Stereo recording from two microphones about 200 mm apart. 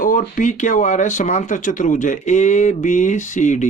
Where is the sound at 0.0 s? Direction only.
40° left (ahead or behind).